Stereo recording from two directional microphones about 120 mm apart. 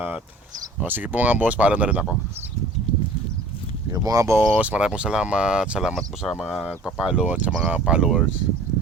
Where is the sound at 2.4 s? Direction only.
20° right (ahead or behind).